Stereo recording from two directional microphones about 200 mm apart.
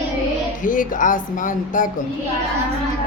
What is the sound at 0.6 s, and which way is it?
Speech, 40° left (ahead or behind).